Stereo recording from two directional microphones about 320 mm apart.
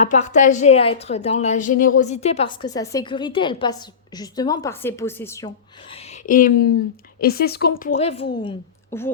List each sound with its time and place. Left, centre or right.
0.0 s a woman's voice: left
5.5 s a woman's voice: centre
8.9 s a woman's voice: centre